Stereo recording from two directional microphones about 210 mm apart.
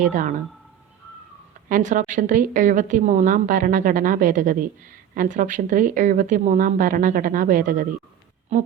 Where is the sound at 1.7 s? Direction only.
35° right (ahead or behind).